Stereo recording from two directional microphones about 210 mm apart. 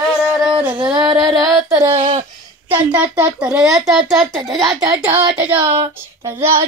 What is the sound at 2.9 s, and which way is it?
A child's voice, 5° right (ahead or behind).